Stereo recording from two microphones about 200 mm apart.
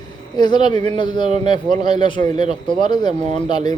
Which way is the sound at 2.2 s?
35° right (ahead or behind).